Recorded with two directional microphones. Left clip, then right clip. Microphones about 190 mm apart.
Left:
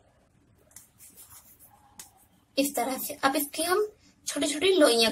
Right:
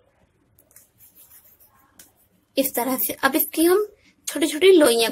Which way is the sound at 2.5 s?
40° right (ahead or behind).